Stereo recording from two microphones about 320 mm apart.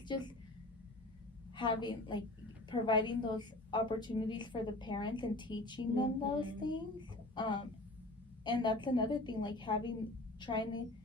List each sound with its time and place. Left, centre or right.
0.1 s a woman's voice: centre
1.5 s a woman's voice: centre